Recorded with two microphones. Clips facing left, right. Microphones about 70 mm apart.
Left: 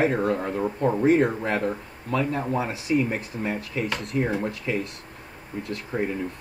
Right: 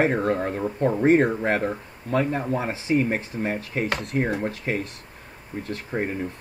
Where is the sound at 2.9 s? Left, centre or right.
Right.